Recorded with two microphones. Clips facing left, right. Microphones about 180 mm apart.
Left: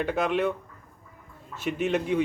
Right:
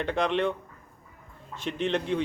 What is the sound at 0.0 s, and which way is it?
Speech, 5° left (ahead or behind).